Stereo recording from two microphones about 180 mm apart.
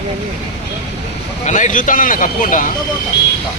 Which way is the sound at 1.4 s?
45° left (ahead or behind).